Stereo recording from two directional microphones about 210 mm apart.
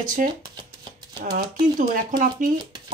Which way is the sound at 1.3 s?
50° right (ahead or behind).